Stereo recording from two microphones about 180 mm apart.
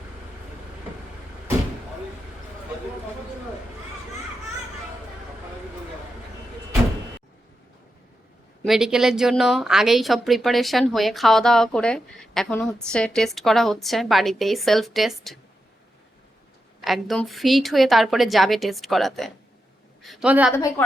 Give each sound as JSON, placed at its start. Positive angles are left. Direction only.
{"t": 8.6, "sound": "speech", "side_deg": 0}
{"t": 16.8, "sound": "speech", "side_deg": 0}
{"t": 20.6, "sound": "a woman's voice", "side_deg": 15}